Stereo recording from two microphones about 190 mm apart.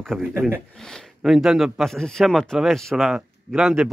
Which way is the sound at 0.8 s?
Centre (ahead or behind).